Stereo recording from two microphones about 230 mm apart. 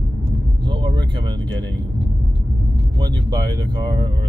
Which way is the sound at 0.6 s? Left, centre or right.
Centre.